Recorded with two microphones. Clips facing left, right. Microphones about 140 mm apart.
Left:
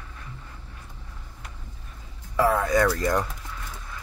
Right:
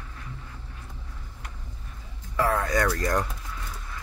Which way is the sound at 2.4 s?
20° left (ahead or behind).